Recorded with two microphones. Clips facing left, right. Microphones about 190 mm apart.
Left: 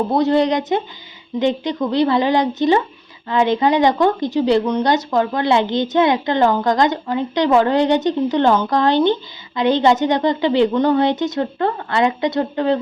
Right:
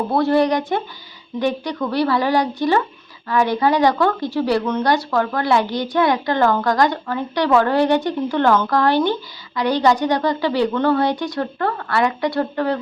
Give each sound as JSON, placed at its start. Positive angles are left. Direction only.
{"t": 0.1, "sound": "speech", "side_deg": 20}